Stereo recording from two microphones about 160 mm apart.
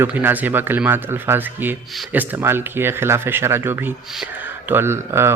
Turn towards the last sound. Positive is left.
turn(degrees=-15)  # may be behind; listen again after turning